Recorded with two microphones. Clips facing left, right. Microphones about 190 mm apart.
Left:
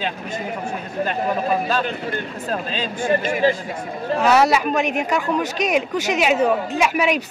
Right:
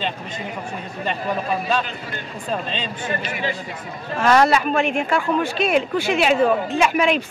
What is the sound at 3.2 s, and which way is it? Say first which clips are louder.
Speech: left 8 dB; 40° left (ahead or behind).